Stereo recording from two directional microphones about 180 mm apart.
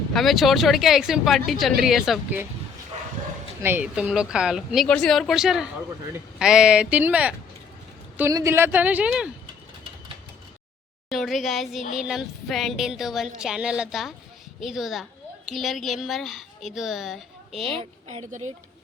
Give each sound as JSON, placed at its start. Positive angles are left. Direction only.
{"t": 0.1, "sound": "a woman's voice", "side_deg": 0}
{"t": 3.6, "sound": "a woman's voice", "side_deg": -10}
{"t": 11.1, "sound": "a woman's voice", "side_deg": 0}
{"t": 17.7, "sound": "a woman's voice", "side_deg": -40}